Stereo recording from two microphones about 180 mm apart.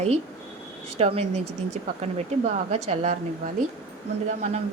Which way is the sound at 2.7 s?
35° right (ahead or behind).